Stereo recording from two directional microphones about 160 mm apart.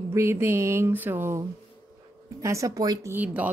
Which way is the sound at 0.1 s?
15° right (ahead or behind).